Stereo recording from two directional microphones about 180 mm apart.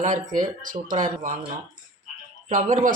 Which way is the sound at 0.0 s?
45° right (ahead or behind).